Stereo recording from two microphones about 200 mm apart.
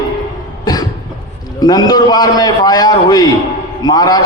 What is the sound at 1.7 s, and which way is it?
A man's voice, 20° left (ahead or behind).